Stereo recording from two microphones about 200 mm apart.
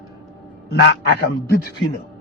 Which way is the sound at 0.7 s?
55° left (ahead or behind).